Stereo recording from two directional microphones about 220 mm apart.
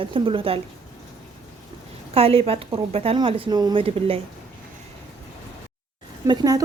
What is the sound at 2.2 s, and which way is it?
A woman's voice, 25° right (ahead or behind).